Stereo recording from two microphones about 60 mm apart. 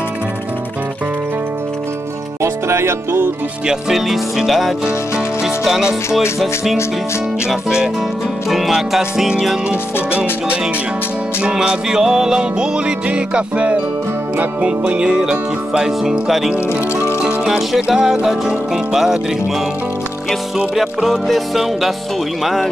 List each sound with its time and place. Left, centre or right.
2.4 s music: right
3.6 s music: centre
4.8 s music: centre
9.9 s music: left
11.4 s music: centre
16.5 s speech: right
17.5 s music: centre
20.2 s music: centre